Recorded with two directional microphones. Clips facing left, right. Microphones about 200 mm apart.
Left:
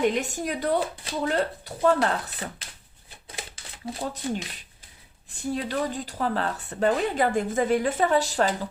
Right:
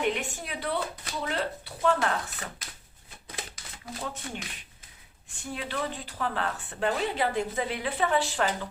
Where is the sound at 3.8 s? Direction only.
30° left (ahead or behind).